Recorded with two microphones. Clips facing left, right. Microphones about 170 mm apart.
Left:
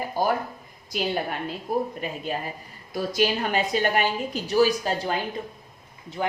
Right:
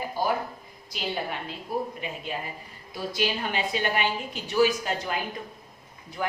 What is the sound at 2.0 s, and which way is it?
A woman's voice, 40° left (ahead or behind).